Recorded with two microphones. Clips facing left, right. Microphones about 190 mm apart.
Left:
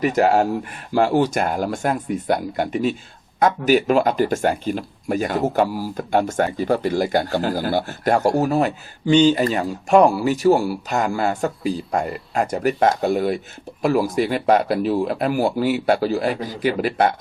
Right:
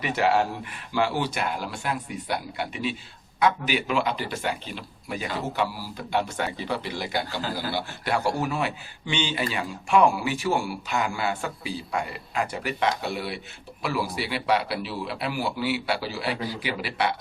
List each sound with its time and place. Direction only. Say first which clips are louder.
0.0 s speech: left 6 dB; 45° left (ahead or behind)